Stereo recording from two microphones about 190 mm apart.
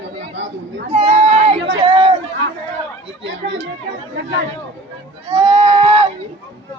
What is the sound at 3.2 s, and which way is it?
Speech, 75° right (ahead or behind).